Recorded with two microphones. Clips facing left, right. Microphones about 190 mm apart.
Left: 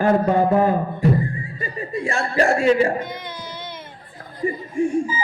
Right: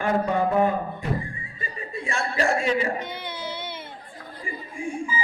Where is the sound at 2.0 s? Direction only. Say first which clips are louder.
Left 5 dB; 40° left (ahead or behind).